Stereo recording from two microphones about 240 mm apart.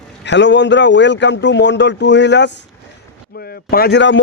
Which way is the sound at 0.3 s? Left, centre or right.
Left.